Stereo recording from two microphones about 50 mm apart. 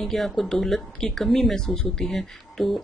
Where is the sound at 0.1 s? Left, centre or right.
Centre.